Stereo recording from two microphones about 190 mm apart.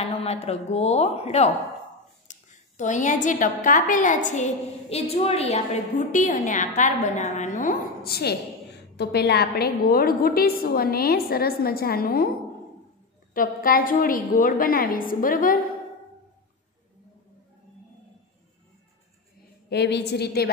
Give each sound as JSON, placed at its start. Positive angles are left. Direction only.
{"t": 0.0, "sound": "a woman's voice", "side_deg": 30}
{"t": 13.3, "sound": "a woman's voice", "side_deg": 50}
{"t": 19.7, "sound": "a woman's voice", "side_deg": 60}